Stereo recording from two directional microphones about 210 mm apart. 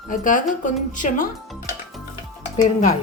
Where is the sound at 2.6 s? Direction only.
35° left (ahead or behind).